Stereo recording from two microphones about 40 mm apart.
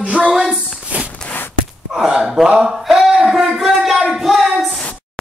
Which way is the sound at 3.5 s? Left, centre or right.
Centre.